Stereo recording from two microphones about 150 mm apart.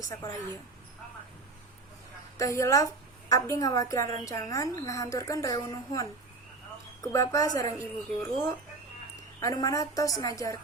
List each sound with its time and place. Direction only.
0.0 s a woman's voice: 25° left (ahead or behind)
2.4 s a woman's voice: 20° left (ahead or behind)